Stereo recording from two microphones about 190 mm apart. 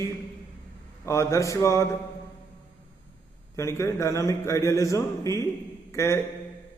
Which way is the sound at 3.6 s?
15° left (ahead or behind).